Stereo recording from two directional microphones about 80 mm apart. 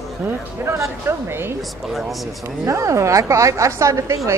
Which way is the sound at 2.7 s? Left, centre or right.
Right.